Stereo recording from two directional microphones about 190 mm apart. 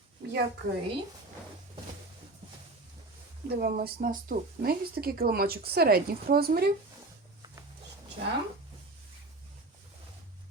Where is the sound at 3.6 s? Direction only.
50° right (ahead or behind).